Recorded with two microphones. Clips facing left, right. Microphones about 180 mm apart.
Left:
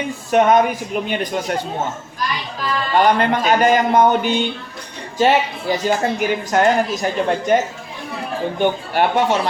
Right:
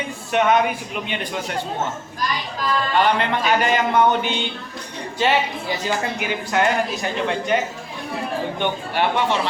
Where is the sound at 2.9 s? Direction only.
45° left (ahead or behind).